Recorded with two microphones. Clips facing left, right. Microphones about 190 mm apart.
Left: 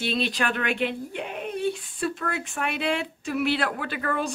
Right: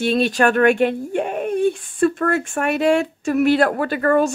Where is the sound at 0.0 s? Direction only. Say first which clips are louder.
Right 10 dB; 45° right (ahead or behind).